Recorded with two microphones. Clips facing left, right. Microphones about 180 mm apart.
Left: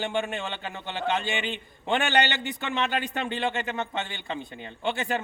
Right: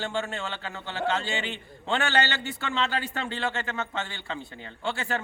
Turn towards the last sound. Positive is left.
turn(degrees=20)  # may be behind; listen again after turning